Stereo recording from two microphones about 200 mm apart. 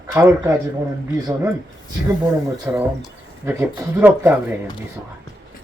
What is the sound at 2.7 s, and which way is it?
Speech, 10° right (ahead or behind).